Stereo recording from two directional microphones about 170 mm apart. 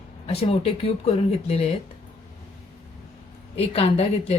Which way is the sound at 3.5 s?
35° left (ahead or behind).